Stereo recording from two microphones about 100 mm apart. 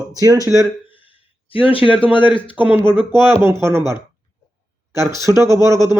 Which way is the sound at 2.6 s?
20° right (ahead or behind).